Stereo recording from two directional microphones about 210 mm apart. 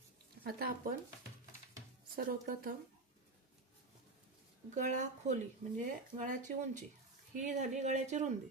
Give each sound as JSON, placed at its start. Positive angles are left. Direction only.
{"t": 0.4, "sound": "a woman's voice", "side_deg": -45}
{"t": 2.1, "sound": "a woman's voice", "side_deg": -45}
{"t": 4.7, "sound": "speech", "side_deg": -35}